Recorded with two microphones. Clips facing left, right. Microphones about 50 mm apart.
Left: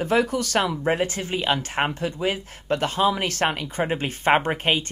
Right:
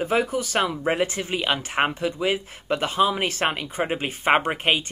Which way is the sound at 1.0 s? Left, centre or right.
Right.